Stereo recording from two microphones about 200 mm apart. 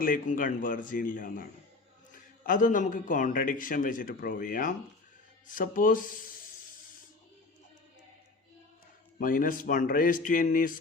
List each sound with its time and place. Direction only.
0.0 s a man's voice: 45° left (ahead or behind)
9.1 s a man's voice: 45° left (ahead or behind)